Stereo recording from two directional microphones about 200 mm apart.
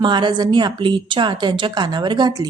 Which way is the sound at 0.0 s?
25° right (ahead or behind).